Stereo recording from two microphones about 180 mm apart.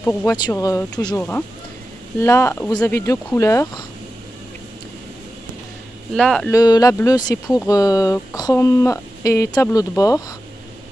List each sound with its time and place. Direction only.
0.0 s speech: 10° left (ahead or behind)
6.1 s speech: centre (ahead or behind)
6.5 s speech: 20° left (ahead or behind)